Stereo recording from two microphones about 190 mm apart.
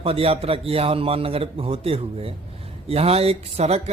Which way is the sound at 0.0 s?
30° right (ahead or behind).